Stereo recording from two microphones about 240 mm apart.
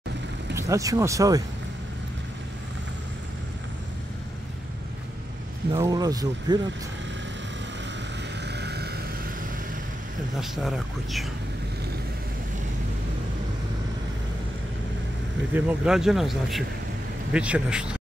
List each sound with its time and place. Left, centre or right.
0.6 s speech: centre
5.7 s speech: centre
8.5 s vehicle: right
10.4 s speech: centre
15.5 s speech: centre